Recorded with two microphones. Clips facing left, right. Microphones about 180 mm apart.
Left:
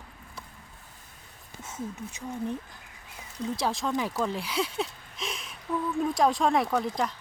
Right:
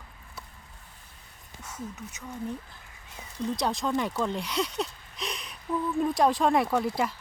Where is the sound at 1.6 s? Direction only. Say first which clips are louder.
Left 3 dB; 25° left (ahead or behind).